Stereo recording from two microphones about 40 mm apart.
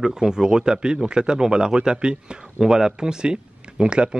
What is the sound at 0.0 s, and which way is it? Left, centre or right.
Speech, centre.